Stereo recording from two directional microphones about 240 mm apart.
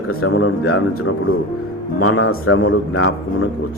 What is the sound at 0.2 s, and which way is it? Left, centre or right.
Speech, left.